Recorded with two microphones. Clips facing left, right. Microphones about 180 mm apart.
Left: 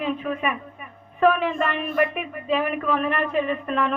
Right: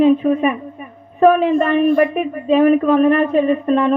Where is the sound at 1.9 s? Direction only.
30° right (ahead or behind).